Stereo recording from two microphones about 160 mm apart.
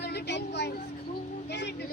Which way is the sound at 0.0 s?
90° left.